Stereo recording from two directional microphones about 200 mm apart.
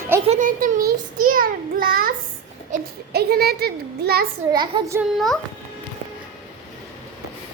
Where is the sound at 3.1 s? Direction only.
50° right (ahead or behind).